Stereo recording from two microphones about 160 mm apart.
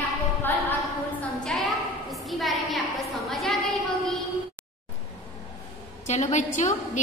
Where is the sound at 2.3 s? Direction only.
Centre (ahead or behind).